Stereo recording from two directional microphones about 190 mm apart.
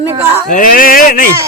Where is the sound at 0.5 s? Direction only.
50° left (ahead or behind).